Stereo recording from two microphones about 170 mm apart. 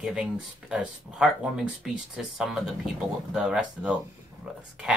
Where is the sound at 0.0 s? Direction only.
5° right (ahead or behind).